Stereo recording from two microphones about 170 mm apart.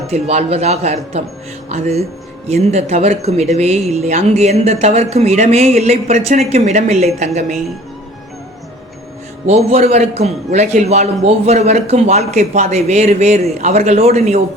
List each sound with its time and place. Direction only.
0.1 s speech: 40° right (ahead or behind)
2.5 s speech: 40° right (ahead or behind)
9.5 s speech: 40° right (ahead or behind)